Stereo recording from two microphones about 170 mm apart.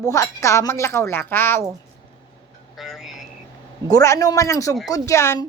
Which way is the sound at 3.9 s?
20° left (ahead or behind).